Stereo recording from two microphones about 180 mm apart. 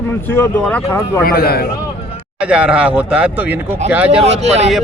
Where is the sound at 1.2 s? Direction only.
60° left (ahead or behind).